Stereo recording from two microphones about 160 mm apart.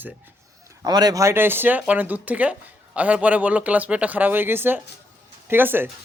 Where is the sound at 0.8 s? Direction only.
25° right (ahead or behind).